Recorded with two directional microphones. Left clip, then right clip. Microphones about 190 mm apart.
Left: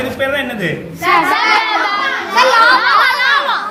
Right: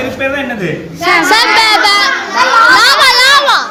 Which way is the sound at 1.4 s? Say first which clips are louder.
Right 5 dB; 60° right (ahead or behind).